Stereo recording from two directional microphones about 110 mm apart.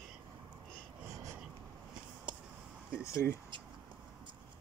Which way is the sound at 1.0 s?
25° right (ahead or behind).